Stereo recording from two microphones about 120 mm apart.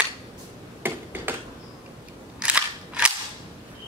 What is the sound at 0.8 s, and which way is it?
Finger snapping, 15° right (ahead or behind).